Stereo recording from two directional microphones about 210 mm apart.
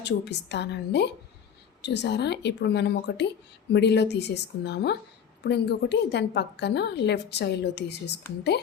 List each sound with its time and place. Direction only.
0.0 s a woman's voice: 55° left (ahead or behind)